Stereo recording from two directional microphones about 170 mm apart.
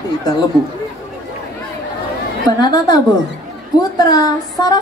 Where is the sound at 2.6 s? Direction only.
25° left (ahead or behind).